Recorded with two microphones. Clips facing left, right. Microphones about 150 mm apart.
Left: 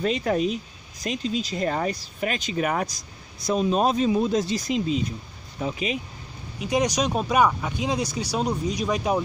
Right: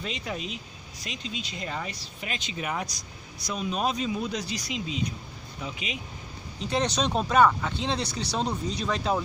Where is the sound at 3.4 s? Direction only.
40° left (ahead or behind).